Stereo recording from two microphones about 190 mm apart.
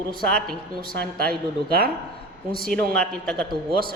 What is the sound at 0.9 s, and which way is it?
Speech, 55° right (ahead or behind).